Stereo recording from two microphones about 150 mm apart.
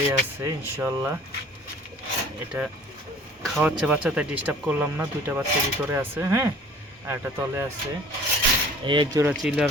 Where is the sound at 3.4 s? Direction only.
Centre (ahead or behind); by 7.7 s 15° right (ahead or behind).